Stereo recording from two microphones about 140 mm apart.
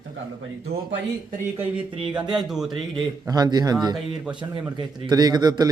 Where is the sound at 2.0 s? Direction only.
5° right (ahead or behind).